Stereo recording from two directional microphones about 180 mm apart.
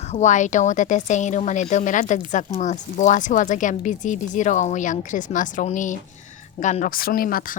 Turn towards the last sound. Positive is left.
turn(degrees=55)  # may be behind; listen again after turning